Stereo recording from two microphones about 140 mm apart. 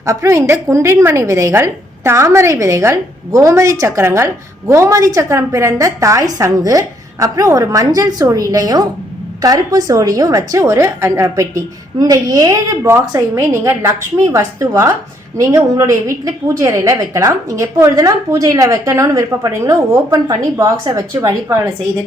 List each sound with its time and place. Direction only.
0.0 s a woman's voice: 20° right (ahead or behind)